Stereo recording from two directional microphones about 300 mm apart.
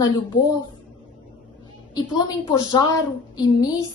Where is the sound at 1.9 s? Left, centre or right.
Centre.